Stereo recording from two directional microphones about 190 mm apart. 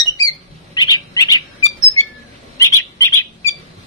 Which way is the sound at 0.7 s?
20° left (ahead or behind).